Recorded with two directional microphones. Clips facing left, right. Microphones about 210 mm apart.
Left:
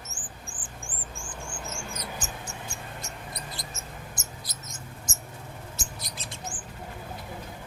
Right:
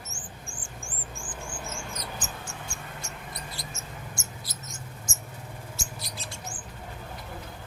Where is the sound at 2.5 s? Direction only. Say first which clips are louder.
Left 1 dB; 20° left (ahead or behind).